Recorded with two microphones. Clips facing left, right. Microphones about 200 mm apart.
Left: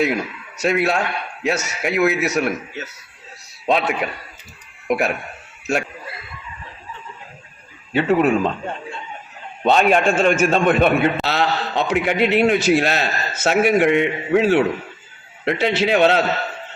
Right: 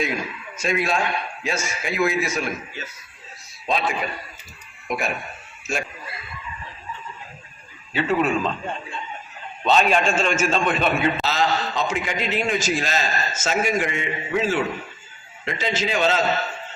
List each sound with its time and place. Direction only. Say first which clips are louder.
0.0 s a man's voice: left 6 dB; 70° left (ahead or behind)
7.9 s a man's voice: left 5 dB; 55° left (ahead or behind)
9.6 s a man's voice: left 4 dB; 55° left (ahead or behind)